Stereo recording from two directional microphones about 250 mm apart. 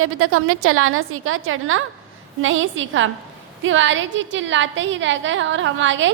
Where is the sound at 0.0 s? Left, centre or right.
Right.